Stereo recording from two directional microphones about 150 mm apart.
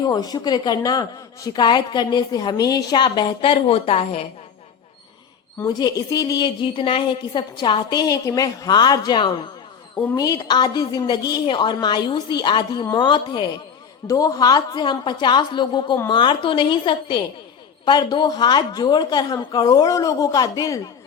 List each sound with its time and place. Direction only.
0.0 s speech: 25° left (ahead or behind)
5.6 s a woman's voice: 25° left (ahead or behind)